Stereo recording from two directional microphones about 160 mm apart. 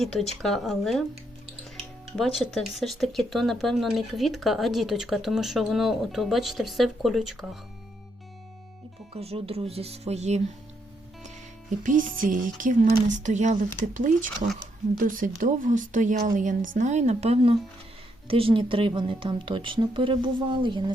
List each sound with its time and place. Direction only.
0.0 s speech: centre (ahead or behind)
2.1 s speech: centre (ahead or behind)
9.1 s speech: 40° right (ahead or behind)
11.8 s speech: 55° right (ahead or behind); by 20.9 s 30° right (ahead or behind)